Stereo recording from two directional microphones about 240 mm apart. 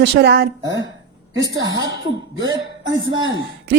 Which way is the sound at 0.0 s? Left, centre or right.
Right.